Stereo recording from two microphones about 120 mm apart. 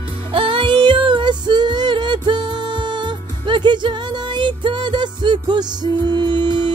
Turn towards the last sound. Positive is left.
turn(degrees=-40)  # may be behind; listen again after turning